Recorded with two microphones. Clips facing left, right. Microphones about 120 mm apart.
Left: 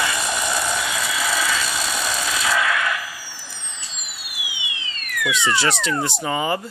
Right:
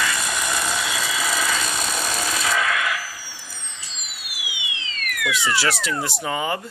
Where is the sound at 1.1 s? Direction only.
15° right (ahead or behind).